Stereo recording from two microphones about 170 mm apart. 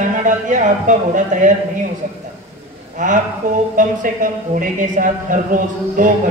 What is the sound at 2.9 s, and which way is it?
A man's voice, 50° right (ahead or behind).